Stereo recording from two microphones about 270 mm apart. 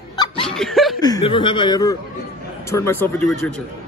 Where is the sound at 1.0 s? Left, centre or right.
Centre.